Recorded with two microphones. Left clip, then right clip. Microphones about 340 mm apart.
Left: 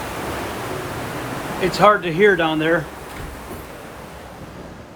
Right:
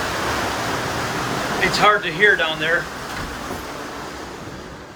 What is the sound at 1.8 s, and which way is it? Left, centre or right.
Speech, centre.